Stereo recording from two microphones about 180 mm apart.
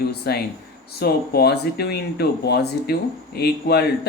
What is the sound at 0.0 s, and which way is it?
Speech, 60° left (ahead or behind).